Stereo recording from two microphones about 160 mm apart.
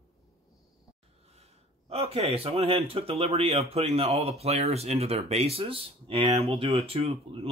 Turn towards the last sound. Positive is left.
turn(degrees=-35)  # may be behind; listen again after turning